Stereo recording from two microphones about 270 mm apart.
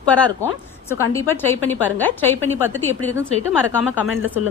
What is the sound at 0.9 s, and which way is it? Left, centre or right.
A woman's voice, centre.